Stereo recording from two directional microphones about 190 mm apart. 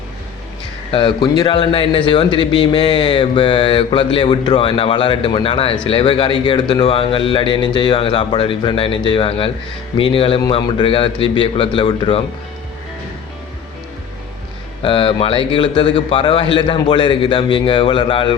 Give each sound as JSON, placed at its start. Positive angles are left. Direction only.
{"t": 0.9, "sound": "speech", "side_deg": 25}
{"t": 14.8, "sound": "speech", "side_deg": 30}